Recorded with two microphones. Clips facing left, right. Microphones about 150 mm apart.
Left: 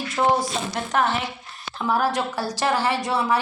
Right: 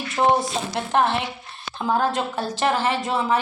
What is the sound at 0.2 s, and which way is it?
Speech, 25° right (ahead or behind).